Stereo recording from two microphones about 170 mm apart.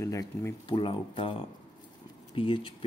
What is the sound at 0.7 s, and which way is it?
Speech, 30° left (ahead or behind).